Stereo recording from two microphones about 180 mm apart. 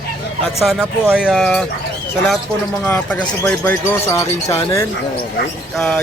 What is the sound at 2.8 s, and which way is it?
Speech, 10° left (ahead or behind).